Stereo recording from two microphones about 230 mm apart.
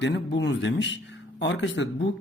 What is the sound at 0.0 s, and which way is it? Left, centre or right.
Speech, left.